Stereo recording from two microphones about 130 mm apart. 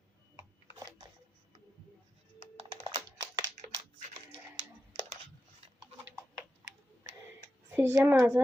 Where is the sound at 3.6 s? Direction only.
70° right (ahead or behind).